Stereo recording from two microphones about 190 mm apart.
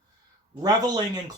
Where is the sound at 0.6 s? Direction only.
20° right (ahead or behind).